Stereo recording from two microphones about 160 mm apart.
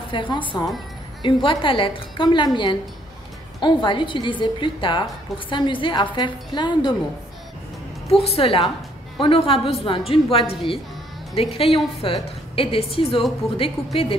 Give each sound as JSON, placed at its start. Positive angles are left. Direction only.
{"t": 0.1, "sound": "a woman's voice", "side_deg": 30}
{"t": 8.1, "sound": "a woman's voice", "side_deg": 40}